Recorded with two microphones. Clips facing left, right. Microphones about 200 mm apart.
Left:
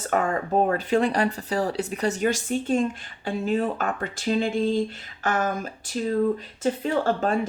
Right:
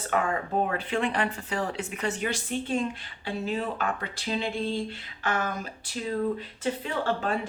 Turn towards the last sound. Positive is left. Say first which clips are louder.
# left 5 dB
turn(degrees=45)  # may be behind; listen again after turning